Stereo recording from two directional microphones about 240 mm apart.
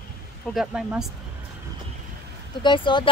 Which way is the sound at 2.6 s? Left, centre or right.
Centre.